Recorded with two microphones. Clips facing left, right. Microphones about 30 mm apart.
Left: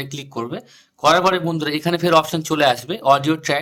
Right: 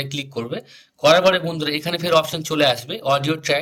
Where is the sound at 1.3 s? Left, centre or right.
Right.